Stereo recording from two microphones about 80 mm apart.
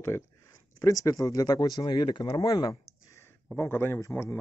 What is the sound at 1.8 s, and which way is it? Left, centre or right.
Speech, left.